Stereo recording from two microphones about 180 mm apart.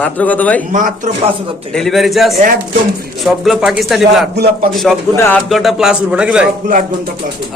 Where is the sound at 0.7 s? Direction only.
45° right (ahead or behind).